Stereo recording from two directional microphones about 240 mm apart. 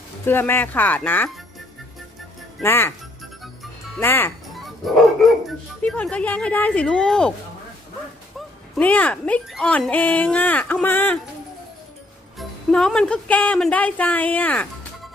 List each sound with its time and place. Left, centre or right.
0.3 s speech: centre
2.6 s speech: centre
3.4 s music: centre
5.8 s speech: centre
8.4 s speech: centre
12.4 s speech: centre